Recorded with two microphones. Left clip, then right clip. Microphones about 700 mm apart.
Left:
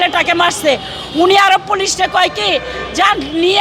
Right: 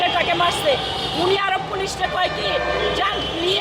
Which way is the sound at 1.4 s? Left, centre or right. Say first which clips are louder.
Left 11 dB; left.